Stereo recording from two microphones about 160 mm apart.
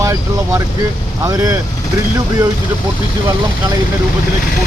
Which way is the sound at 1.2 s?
20° right (ahead or behind).